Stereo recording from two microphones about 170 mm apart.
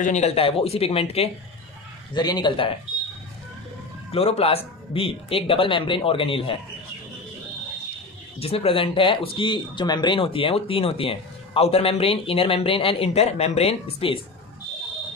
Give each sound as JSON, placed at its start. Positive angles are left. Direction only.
{"t": 0.0, "sound": "speech", "side_deg": 40}
{"t": 2.1, "sound": "a man's voice", "side_deg": 25}
{"t": 4.1, "sound": "speech", "side_deg": 35}
{"t": 8.4, "sound": "speech", "side_deg": 35}